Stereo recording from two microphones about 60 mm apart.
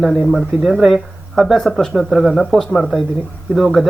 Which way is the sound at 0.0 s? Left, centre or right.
Centre.